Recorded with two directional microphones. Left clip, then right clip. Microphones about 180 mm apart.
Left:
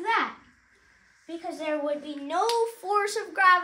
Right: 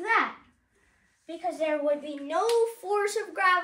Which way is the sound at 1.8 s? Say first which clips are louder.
Right 2 dB; 20° left (ahead or behind).